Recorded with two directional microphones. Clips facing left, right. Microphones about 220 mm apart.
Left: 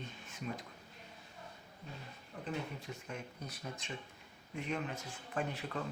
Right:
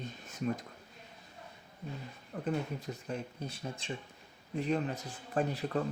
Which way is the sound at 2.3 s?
45° right (ahead or behind).